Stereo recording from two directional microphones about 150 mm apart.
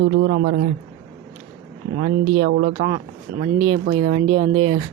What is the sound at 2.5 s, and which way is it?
Speech, 90° right.